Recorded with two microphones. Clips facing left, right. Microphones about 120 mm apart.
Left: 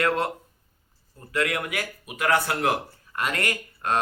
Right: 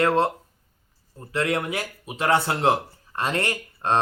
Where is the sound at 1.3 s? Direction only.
30° right (ahead or behind).